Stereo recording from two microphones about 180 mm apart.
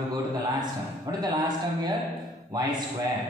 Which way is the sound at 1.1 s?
20° right (ahead or behind).